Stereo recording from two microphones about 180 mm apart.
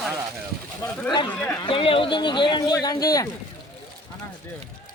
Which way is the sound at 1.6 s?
30° left (ahead or behind).